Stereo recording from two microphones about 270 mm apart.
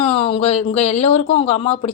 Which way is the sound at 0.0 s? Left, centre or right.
Left.